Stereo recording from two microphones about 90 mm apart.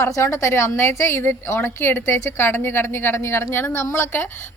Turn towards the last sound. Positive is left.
turn(degrees=25)  # may be behind; listen again after turning